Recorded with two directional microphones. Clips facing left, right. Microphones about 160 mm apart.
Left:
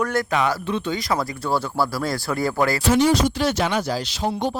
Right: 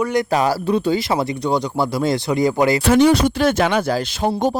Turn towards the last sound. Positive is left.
turn(degrees=-50)  # may be behind; listen again after turning